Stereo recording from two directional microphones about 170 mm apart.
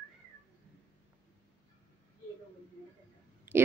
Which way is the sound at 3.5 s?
10° right (ahead or behind).